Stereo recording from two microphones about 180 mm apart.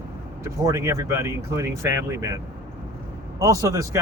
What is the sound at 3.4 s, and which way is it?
Speech, 15° right (ahead or behind).